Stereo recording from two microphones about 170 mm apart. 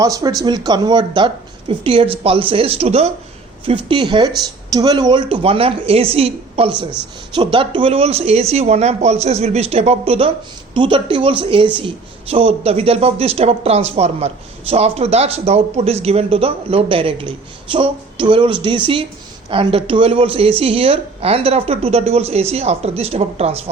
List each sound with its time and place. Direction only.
0.0 s speech: 20° right (ahead or behind); by 23.6 s 35° right (ahead or behind)